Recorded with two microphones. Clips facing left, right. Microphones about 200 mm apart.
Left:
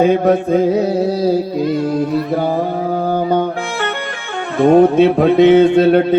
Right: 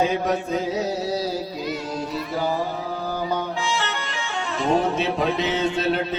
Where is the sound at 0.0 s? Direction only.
55° left (ahead or behind).